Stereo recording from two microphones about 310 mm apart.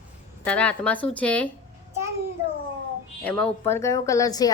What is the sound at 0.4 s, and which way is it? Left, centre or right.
Speech, centre.